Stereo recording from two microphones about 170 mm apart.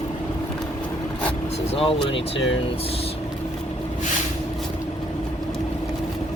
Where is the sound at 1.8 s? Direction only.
30° left (ahead or behind).